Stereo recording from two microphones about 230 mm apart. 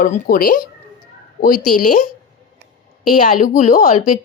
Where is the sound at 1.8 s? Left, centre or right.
Left.